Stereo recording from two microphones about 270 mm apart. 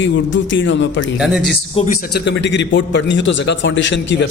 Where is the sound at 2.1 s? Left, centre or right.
Left.